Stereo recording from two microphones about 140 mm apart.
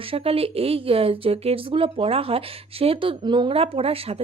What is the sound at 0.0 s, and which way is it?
Speech, 40° right (ahead or behind).